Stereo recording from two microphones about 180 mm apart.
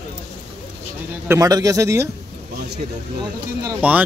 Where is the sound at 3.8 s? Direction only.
10° right (ahead or behind).